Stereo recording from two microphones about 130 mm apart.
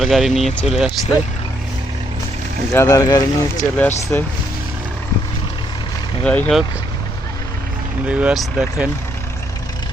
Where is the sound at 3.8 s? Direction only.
15° left (ahead or behind).